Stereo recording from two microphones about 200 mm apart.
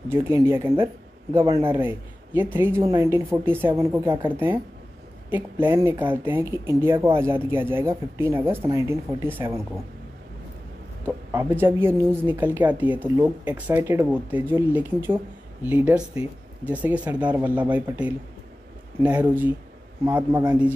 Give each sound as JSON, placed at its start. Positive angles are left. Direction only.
{"t": 0.1, "sound": "a woman's voice", "side_deg": -15}
{"t": 11.1, "sound": "a woman's voice", "side_deg": -10}